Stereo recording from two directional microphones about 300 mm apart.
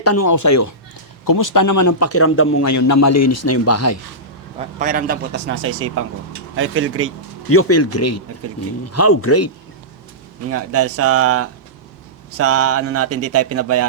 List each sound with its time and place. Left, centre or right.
0.0 s speech: left
1.2 s speech: left
2.6 s speech: left
4.8 s a man's voice: right
7.5 s speech: left
10.5 s speech: right